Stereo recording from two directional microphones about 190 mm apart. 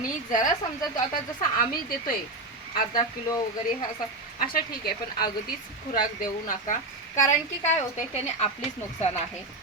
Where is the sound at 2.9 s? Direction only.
20° left (ahead or behind).